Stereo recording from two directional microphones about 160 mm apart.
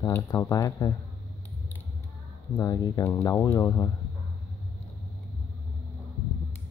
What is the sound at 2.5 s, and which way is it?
Speech, 20° left (ahead or behind).